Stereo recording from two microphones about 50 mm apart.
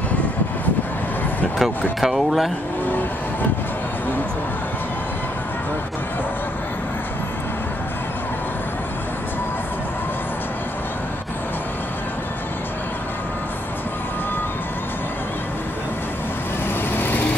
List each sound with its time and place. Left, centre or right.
1.6 s speech: centre
16.9 s vehicle: left